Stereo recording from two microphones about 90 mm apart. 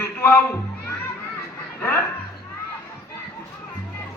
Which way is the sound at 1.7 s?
20° left (ahead or behind).